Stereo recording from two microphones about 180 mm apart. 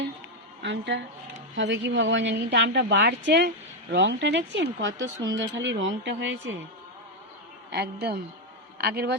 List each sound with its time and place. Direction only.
0.6 s a woman's voice: 85° right
7.7 s a woman's voice: 65° right (ahead or behind)